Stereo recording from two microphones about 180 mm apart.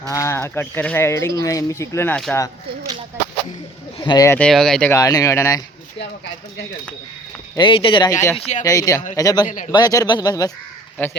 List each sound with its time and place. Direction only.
0.1 s speech: 15° left (ahead or behind)
3.9 s speech: 25° left (ahead or behind)
4.4 s speech: 5° left (ahead or behind)
4.9 s speech: 20° left (ahead or behind)
7.5 s speech: 25° left (ahead or behind)
8.4 s speech: 35° left (ahead or behind)
8.6 s speech: 20° left (ahead or behind)